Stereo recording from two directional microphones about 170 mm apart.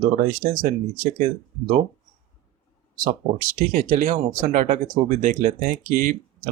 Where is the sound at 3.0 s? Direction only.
55° right (ahead or behind).